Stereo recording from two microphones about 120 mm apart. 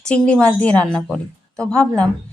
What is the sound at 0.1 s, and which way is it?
A woman's voice, 10° left (ahead or behind).